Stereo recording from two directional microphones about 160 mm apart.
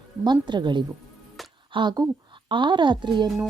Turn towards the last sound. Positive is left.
turn(degrees=-30)  # may be behind; listen again after turning